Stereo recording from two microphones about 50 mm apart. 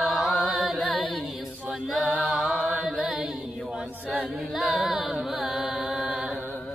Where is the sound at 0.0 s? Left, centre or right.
Centre.